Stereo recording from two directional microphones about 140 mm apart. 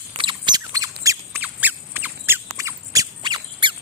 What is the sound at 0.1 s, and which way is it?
Squeak, 35° right (ahead or behind).